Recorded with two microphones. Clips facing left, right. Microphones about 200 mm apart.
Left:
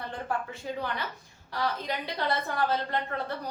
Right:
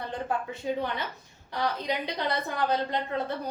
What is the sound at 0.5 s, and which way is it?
A woman's voice, 20° right (ahead or behind).